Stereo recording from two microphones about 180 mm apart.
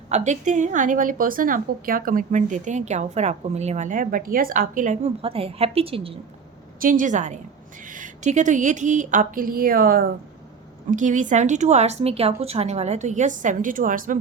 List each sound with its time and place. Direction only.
0.1 s a woman's voice: 40° right (ahead or behind)
6.7 s a woman's voice: 50° right (ahead or behind)